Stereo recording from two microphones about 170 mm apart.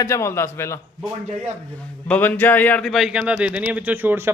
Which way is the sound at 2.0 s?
10° left (ahead or behind).